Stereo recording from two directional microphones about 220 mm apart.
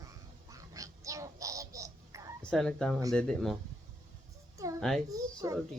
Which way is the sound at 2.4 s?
5° left (ahead or behind).